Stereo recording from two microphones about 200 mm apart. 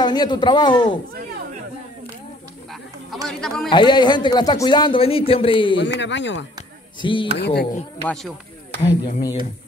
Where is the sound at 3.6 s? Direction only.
20° left (ahead or behind).